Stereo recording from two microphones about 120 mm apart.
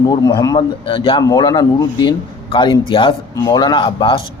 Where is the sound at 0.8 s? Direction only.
50° left (ahead or behind).